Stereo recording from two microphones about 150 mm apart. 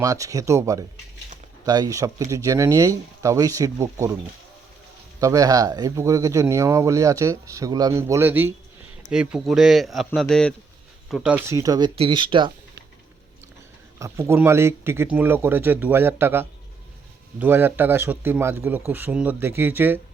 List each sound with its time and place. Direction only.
0.0 s speech: 25° right (ahead or behind)
5.2 s a man's voice: 25° right (ahead or behind); by 11.3 s 5° right (ahead or behind)
11.4 s speech: 20° right (ahead or behind)
11.9 s speech: 35° right (ahead or behind)
14.0 s speech: 20° right (ahead or behind)